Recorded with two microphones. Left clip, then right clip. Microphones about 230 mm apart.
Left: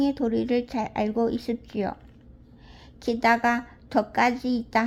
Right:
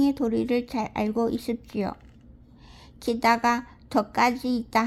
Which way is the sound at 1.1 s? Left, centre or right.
Right.